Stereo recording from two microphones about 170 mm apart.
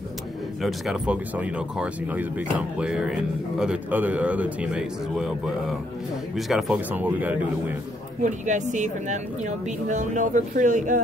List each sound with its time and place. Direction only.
0.6 s speech: centre (ahead or behind)
8.2 s speech: 45° right (ahead or behind)